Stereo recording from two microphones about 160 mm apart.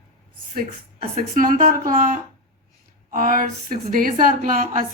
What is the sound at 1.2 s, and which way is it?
A woman's voice, 60° right (ahead or behind).